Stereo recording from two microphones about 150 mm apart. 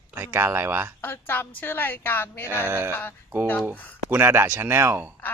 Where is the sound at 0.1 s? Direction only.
15° right (ahead or behind).